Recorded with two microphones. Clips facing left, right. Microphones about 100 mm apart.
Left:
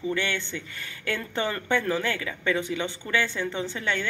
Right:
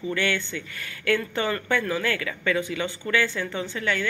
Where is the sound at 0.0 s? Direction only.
20° left (ahead or behind).